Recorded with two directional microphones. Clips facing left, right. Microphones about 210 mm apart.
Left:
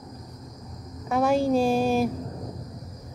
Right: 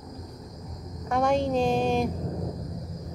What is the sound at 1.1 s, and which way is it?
A woman's voice, 5° left (ahead or behind).